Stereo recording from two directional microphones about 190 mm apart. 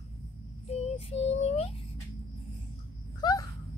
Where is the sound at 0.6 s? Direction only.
35° left (ahead or behind).